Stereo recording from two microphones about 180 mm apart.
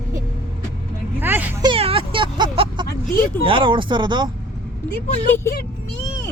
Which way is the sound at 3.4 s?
30° right (ahead or behind).